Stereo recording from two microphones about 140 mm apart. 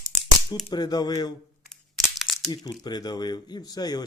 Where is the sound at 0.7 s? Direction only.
30° left (ahead or behind).